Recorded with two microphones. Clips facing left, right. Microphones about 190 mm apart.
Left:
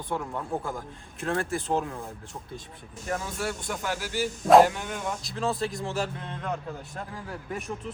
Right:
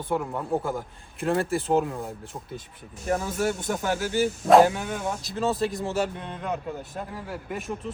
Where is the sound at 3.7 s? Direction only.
45° right (ahead or behind).